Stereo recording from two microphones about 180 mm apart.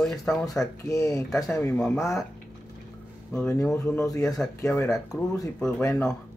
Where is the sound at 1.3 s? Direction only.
5° left (ahead or behind).